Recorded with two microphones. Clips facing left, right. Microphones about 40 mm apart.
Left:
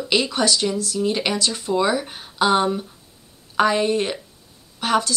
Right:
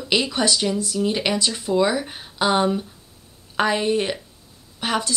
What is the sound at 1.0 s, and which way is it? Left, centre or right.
A woman's voice, centre.